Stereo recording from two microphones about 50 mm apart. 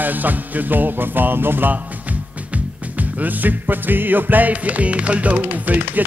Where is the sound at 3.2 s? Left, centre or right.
Right.